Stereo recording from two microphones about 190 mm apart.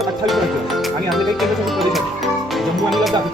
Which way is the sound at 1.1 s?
Centre (ahead or behind).